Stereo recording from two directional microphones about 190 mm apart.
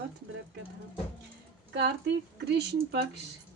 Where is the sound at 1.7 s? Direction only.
65° right (ahead or behind).